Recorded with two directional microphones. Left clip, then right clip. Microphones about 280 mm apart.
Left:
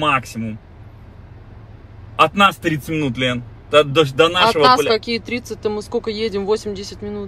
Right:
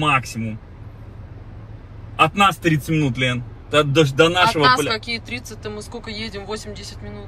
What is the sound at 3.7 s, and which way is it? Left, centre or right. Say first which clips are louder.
A man's voice: left 3 dB; centre.